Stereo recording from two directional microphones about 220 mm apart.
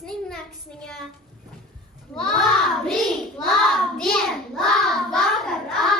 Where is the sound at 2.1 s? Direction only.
Centre (ahead or behind).